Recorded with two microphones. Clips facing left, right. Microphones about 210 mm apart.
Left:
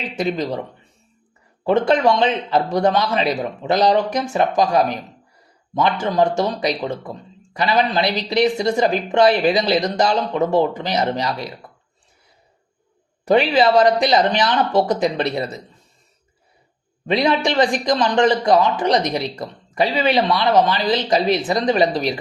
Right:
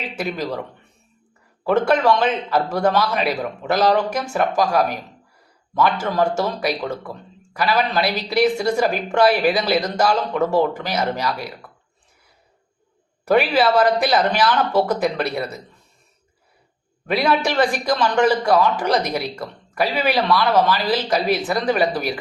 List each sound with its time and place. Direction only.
0.2 s speech: 20° left (ahead or behind)
1.6 s speech: 20° left (ahead or behind)
13.3 s speech: 20° left (ahead or behind)
17.1 s speech: 20° left (ahead or behind)